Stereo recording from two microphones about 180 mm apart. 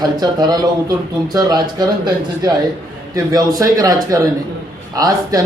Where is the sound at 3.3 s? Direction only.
20° right (ahead or behind).